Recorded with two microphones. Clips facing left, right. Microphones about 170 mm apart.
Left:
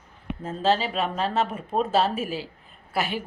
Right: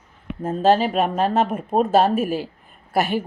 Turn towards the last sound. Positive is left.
turn(degrees=-45)  # may be behind; listen again after turning